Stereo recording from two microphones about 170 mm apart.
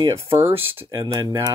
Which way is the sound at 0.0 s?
15° right (ahead or behind).